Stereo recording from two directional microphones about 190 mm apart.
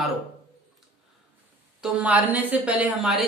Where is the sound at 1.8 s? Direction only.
10° right (ahead or behind).